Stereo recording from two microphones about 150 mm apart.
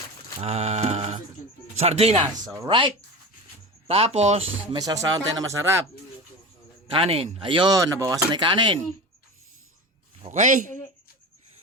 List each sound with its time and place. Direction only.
0.4 s a sound: 45° right (ahead or behind)
2.6 s speech: 35° right (ahead or behind)
3.8 s a sound: 40° right (ahead or behind)
4.7 s speech: 25° right (ahead or behind)
6.9 s speech: 40° right (ahead or behind)
10.2 s a man's voice: 60° right (ahead or behind)